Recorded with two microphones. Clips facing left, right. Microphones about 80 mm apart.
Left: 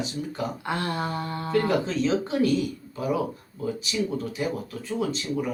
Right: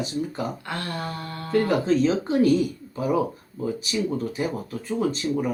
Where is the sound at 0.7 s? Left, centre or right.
Left.